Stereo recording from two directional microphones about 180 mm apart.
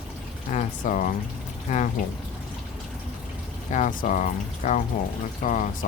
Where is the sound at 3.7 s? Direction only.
45° left (ahead or behind).